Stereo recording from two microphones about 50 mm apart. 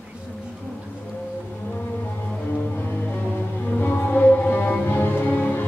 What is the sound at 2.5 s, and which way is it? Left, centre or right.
Music, left.